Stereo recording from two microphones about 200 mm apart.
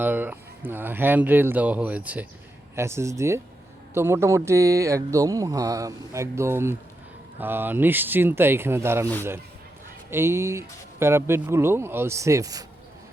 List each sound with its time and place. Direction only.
0.0 s speech: 10° right (ahead or behind)
10.1 s speech: 10° right (ahead or behind)